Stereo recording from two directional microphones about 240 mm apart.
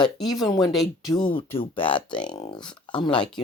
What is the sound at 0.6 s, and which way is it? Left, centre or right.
Speech, centre.